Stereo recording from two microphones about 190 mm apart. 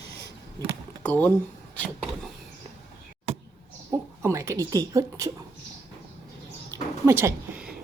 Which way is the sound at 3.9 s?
15° right (ahead or behind).